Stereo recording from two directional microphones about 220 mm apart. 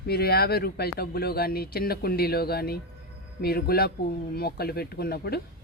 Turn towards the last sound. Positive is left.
turn(degrees=45)  # may be behind; listen again after turning